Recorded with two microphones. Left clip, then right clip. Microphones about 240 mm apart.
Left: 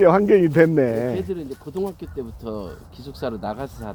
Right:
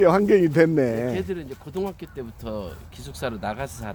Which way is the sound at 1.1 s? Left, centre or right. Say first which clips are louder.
Left 2 dB; right.